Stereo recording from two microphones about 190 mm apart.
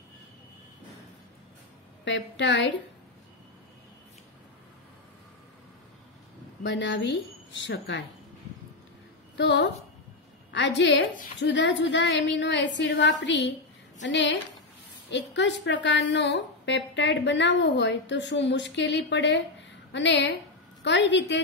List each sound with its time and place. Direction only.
2.0 s a woman's voice: 70° left (ahead or behind)
6.6 s a woman's voice: 70° left (ahead or behind)
9.4 s a woman's voice: 65° left (ahead or behind)